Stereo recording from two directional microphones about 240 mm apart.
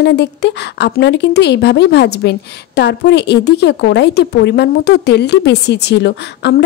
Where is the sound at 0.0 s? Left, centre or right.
Left.